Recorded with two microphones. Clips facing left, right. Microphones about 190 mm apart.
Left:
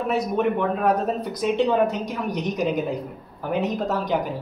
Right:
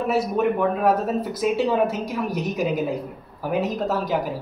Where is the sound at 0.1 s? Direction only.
5° right (ahead or behind).